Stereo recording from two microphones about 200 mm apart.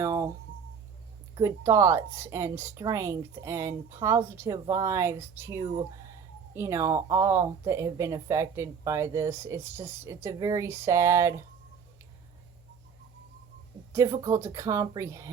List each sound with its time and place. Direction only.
0.0 s a sound: 15° right (ahead or behind)
1.4 s speech: 15° right (ahead or behind)
13.9 s speech: 15° right (ahead or behind)